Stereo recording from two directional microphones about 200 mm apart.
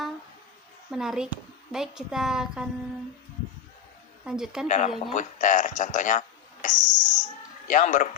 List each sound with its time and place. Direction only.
0.9 s a woman's voice: centre (ahead or behind)
4.2 s a woman's voice: 5° right (ahead or behind)
4.7 s a man's voice: 40° left (ahead or behind)